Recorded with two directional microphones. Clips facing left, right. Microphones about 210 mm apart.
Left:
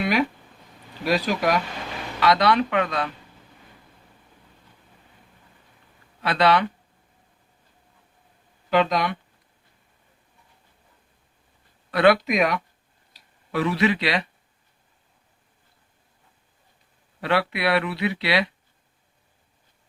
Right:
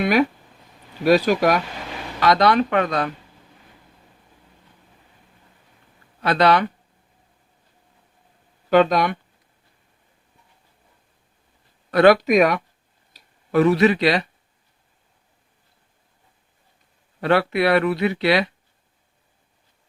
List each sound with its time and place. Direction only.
1.0 s speech: 50° right (ahead or behind)
6.2 s speech: 40° right (ahead or behind)
8.7 s speech: 45° right (ahead or behind)
11.9 s speech: 45° right (ahead or behind)
17.2 s speech: 45° right (ahead or behind)